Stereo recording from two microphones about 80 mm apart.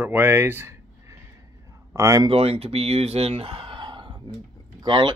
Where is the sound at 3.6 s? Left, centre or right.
Right.